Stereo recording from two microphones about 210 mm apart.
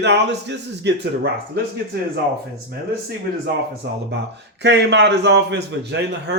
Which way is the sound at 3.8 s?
50° right (ahead or behind).